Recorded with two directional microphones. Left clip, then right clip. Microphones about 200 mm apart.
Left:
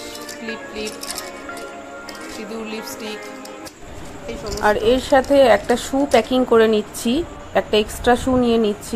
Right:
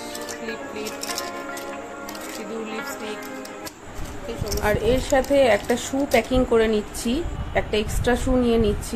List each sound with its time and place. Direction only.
4.6 s speech: 20° left (ahead or behind)